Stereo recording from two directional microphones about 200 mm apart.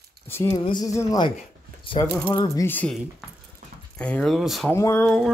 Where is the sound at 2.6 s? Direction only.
10° left (ahead or behind).